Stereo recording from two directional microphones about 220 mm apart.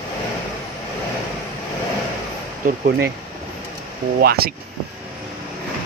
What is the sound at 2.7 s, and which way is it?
Speech, 45° right (ahead or behind).